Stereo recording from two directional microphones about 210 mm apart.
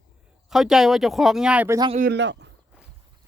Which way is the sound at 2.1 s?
55° right (ahead or behind).